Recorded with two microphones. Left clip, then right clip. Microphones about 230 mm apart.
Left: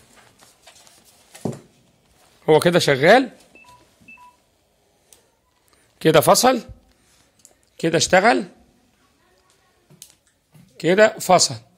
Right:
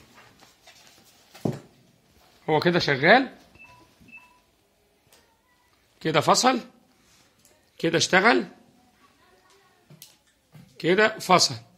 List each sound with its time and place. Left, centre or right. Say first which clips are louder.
2.4 s speech: left 7 dB; left
5.9 s speech: left 7 dB; left
7.7 s speech: left 5 dB; left
10.8 s speech: left 6 dB; left